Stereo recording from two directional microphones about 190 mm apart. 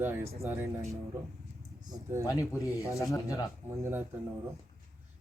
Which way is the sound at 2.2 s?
15° left (ahead or behind).